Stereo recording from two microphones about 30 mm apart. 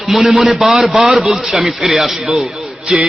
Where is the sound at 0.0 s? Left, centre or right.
Centre.